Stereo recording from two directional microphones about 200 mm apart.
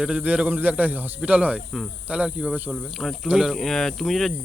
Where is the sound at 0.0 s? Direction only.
5° right (ahead or behind).